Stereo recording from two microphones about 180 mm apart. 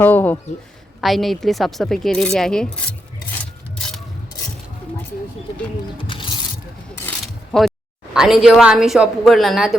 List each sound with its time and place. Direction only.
0.0 s speech: 10° left (ahead or behind)
3.8 s mechanisms: 5° left (ahead or behind)
6.0 s pulleys: 25° left (ahead or behind)
7.5 s speech: 5° left (ahead or behind)